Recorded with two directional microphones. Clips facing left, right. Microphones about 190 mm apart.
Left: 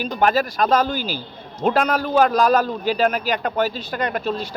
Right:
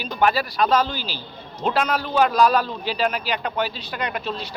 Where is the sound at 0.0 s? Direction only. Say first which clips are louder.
Left 2 dB; 45° left (ahead or behind).